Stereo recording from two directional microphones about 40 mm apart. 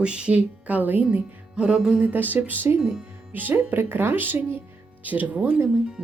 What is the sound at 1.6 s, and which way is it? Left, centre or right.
Music, right.